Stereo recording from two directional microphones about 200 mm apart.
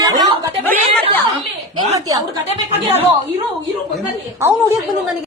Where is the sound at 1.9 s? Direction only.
15° right (ahead or behind).